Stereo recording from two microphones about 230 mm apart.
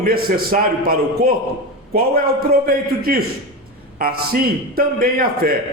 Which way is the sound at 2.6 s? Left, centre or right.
Right.